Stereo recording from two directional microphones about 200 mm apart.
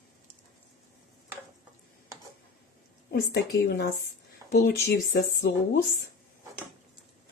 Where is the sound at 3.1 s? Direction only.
55° left (ahead or behind).